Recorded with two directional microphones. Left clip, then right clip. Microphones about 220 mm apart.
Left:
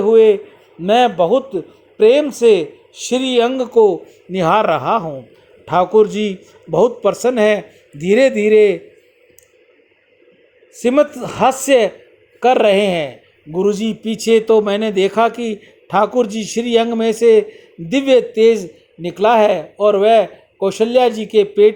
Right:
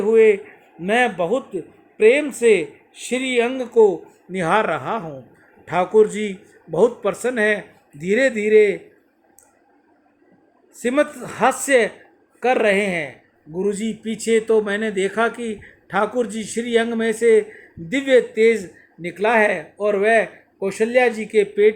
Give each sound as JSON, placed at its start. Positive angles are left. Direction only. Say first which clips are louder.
{"t": 0.0, "sound": "a man's voice", "louder": "left 4 dB", "side_deg": 10}
{"t": 10.8, "sound": "a man's voice", "louder": "left 6 dB", "side_deg": 15}